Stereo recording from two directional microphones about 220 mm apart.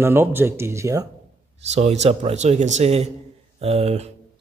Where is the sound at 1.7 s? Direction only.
30° right (ahead or behind).